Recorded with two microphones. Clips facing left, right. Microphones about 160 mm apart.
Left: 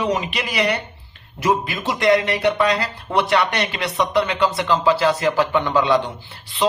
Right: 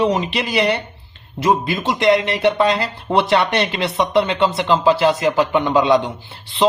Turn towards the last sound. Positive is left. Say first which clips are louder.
# right 4 dB
turn(degrees=-25)  # may be behind; listen again after turning